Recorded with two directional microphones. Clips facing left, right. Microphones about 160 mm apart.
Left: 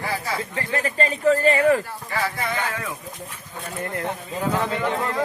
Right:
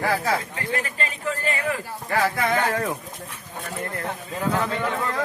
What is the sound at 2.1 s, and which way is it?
Speech, 50° right (ahead or behind).